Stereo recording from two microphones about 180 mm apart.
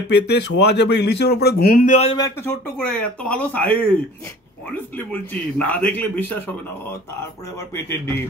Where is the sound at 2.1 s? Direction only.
20° left (ahead or behind).